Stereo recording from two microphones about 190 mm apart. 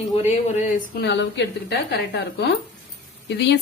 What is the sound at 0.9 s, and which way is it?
A woman's voice, 65° left (ahead or behind).